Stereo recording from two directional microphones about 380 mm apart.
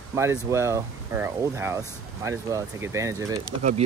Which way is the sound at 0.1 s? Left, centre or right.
Centre.